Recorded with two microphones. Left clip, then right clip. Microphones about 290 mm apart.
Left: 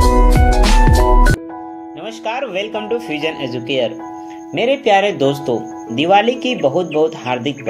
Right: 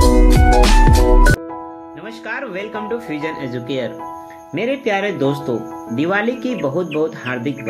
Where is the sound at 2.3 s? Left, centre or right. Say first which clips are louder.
Left 3 dB; left.